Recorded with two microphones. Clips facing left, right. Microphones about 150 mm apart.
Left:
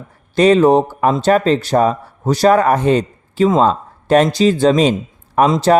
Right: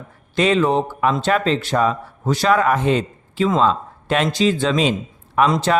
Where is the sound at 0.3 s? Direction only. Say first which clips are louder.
Left 7 dB; 40° left (ahead or behind).